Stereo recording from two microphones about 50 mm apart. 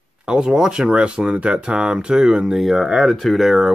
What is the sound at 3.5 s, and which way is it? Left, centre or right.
Speech, centre.